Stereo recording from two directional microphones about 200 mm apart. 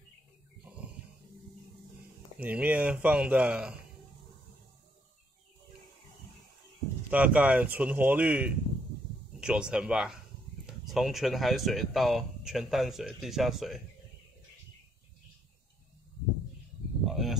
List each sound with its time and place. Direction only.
2.3 s speech: 5° right (ahead or behind)
7.1 s speech: 5° right (ahead or behind)
17.0 s a sound: centre (ahead or behind)